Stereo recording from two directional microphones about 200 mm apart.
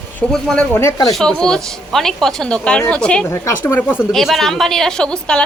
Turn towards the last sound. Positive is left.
turn(degrees=5)  # may be behind; listen again after turning